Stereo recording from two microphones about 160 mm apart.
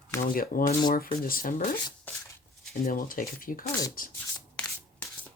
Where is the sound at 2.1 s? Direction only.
10° left (ahead or behind).